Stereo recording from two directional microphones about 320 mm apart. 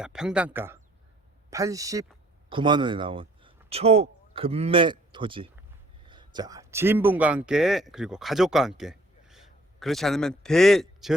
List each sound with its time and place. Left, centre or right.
0.0 s speech: centre